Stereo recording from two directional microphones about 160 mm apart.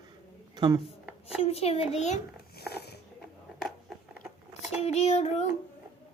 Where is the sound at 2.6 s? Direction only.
85° left.